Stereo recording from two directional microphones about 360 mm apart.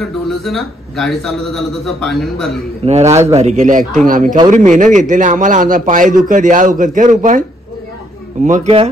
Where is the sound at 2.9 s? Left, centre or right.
Centre.